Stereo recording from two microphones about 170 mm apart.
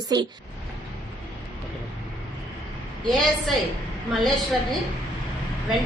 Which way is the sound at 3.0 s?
Centre (ahead or behind).